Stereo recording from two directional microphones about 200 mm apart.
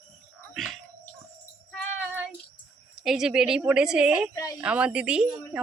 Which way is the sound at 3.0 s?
Centre (ahead or behind).